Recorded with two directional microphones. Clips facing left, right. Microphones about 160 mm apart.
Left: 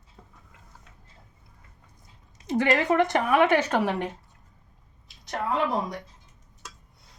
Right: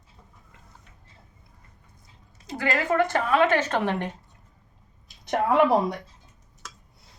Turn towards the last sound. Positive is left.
turn(degrees=-65)  # may be behind; listen again after turning